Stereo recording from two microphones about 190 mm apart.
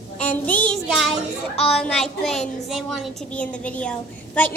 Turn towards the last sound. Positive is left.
turn(degrees=5)  # may be behind; listen again after turning